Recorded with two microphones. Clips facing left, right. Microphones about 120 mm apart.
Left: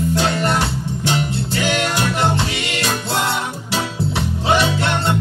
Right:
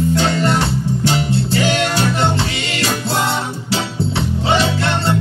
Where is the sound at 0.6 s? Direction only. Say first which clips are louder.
Right 4 dB; 30° right (ahead or behind).